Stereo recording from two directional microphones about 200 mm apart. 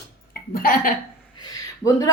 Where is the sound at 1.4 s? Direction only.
15° left (ahead or behind).